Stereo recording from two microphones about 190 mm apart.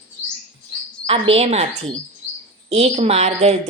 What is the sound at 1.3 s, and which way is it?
A woman's voice, 35° right (ahead or behind).